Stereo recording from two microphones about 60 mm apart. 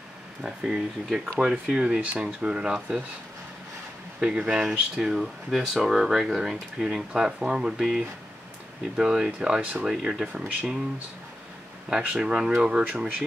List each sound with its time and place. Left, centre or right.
0.4 s speech: centre
4.2 s speech: centre
12.0 s speech: centre